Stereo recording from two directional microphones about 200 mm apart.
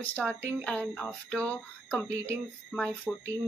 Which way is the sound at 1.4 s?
10° left (ahead or behind).